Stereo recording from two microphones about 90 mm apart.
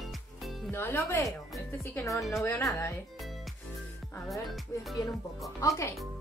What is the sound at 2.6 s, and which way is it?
Speech, 35° left (ahead or behind).